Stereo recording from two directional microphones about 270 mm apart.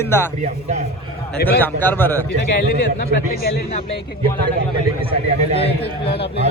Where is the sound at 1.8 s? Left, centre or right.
Centre.